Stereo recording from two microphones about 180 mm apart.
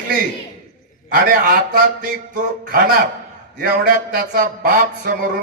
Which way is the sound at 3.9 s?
50° right (ahead or behind).